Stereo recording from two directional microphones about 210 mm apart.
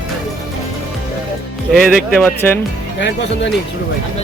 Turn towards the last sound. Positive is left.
turn(degrees=55)  # may be behind; listen again after turning